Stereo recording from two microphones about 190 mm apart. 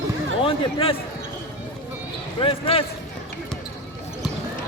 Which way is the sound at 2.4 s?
30° left (ahead or behind).